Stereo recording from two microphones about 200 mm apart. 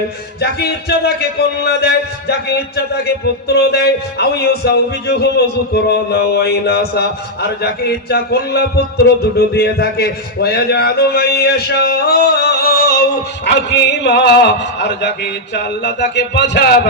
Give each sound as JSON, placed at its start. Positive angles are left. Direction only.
{"t": 0.3, "sound": "speech", "side_deg": 55}
{"t": 3.5, "sound": "speech", "side_deg": 55}